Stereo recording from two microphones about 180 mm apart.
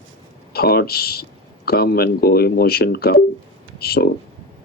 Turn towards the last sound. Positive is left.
turn(degrees=60)  # may be behind; listen again after turning